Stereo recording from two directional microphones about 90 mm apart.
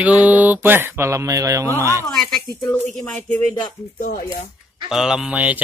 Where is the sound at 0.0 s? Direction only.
15° right (ahead or behind); by 1.7 s 40° right (ahead or behind).